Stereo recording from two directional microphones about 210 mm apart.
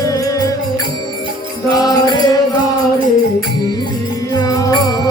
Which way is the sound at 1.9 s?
20° left (ahead or behind).